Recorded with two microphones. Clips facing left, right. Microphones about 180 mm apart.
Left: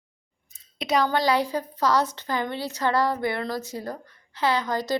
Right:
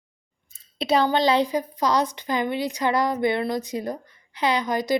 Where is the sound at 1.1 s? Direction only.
20° right (ahead or behind).